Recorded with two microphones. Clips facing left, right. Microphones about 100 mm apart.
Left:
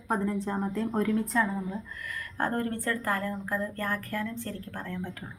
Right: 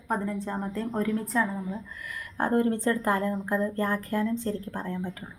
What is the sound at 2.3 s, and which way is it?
Speech, 15° right (ahead or behind).